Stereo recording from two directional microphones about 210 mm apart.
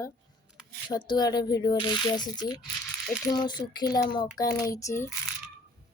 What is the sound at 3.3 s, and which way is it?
Speech, 20° left (ahead or behind).